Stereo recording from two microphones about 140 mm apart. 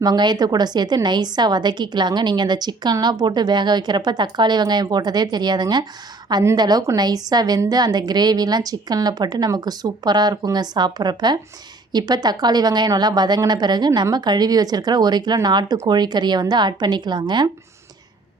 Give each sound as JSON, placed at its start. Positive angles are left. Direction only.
{"t": 0.0, "sound": "a woman's voice", "side_deg": -30}